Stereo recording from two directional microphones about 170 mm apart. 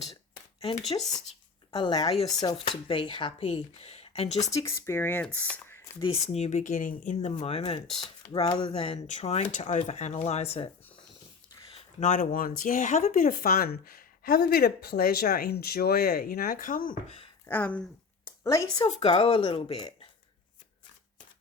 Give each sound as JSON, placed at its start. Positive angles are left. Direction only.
{"t": 0.6, "sound": "speech", "side_deg": 30}
{"t": 4.4, "sound": "speech", "side_deg": 15}
{"t": 6.0, "sound": "speech", "side_deg": 40}
{"t": 7.2, "sound": "speech", "side_deg": 35}
{"t": 11.8, "sound": "a sound", "side_deg": 40}
{"t": 12.2, "sound": "speech", "side_deg": 55}
{"t": 17.4, "sound": "speech", "side_deg": 10}
{"t": 18.3, "sound": "a sound", "side_deg": 15}
{"t": 18.8, "sound": "speech", "side_deg": 35}